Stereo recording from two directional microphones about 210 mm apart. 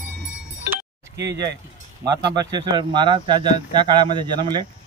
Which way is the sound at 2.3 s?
20° right (ahead or behind).